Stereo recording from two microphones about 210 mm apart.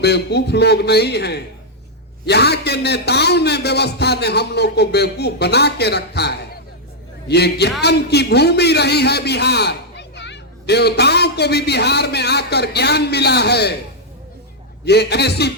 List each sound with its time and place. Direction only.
0.0 s a man's voice: 50° left (ahead or behind)
14.8 s a man's voice: 50° left (ahead or behind)